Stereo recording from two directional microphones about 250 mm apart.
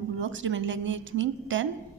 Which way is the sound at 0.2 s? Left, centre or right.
Right.